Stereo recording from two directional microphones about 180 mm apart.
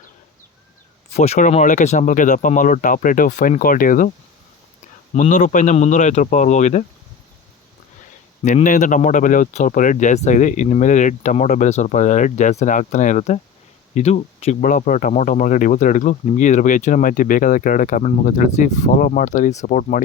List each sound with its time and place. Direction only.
1.1 s speech: 35° left (ahead or behind)
5.1 s speech: 45° left (ahead or behind)
8.4 s speech: 45° left (ahead or behind)